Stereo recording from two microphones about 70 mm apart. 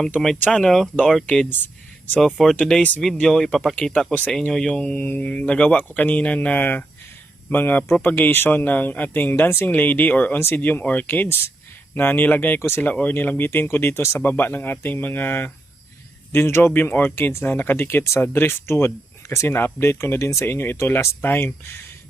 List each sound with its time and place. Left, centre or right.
0.4 s speech: centre
1.5 s speech: left
2.2 s speech: centre
3.8 s speech: centre
4.9 s speech: left
12.5 s speech: left
12.8 s speech: left